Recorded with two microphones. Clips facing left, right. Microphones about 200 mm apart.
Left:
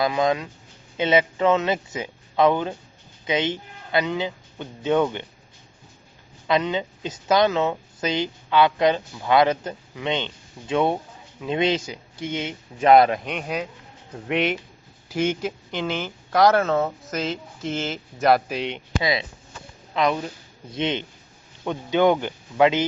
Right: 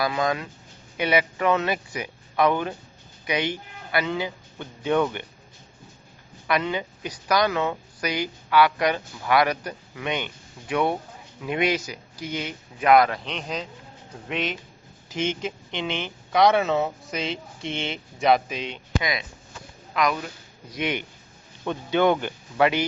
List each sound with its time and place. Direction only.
0.0 s speech: 20° left (ahead or behind)
6.5 s speech: 20° left (ahead or behind)
13.2 s speech: 10° left (ahead or behind)
14.3 s speech: 65° left (ahead or behind)
15.1 s speech: 10° left (ahead or behind)
18.7 s speech: 25° left (ahead or behind)